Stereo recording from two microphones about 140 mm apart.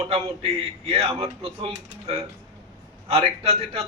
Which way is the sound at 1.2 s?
40° right (ahead or behind).